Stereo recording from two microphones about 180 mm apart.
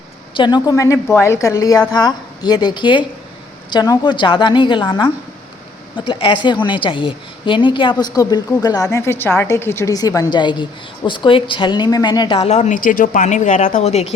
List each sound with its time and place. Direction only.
0.3 s a woman's voice: 25° left (ahead or behind)
12.4 s a woman's voice: 40° left (ahead or behind)